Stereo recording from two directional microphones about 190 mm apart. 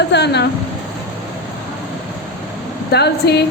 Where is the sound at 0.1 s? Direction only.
65° left (ahead or behind).